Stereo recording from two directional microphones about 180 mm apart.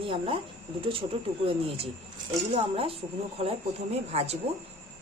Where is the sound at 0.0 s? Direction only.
30° right (ahead or behind).